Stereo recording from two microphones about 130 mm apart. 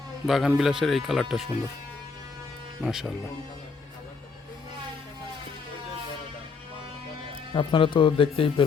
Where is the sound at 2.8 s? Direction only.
5° right (ahead or behind).